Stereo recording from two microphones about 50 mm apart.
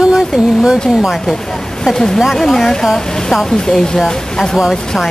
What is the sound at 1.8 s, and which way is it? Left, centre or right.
Speech, centre.